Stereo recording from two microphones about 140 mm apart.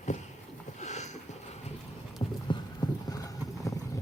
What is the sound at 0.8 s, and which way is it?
Sniff, 55° left (ahead or behind).